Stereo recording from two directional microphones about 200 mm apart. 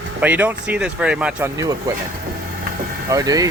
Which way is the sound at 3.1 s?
15° right (ahead or behind).